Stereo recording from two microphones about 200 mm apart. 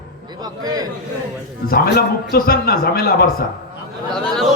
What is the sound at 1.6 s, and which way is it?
A man's voice, 50° left (ahead or behind).